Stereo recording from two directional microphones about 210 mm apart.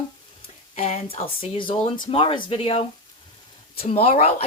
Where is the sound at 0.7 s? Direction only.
30° left (ahead or behind).